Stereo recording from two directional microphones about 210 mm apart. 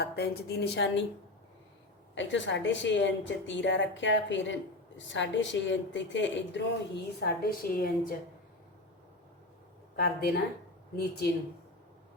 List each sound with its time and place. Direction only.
0.0 s a woman's voice: 50° left (ahead or behind)
2.1 s a woman's voice: 60° left (ahead or behind); by 7.9 s 45° left (ahead or behind)
9.9 s a woman's voice: 45° left (ahead or behind)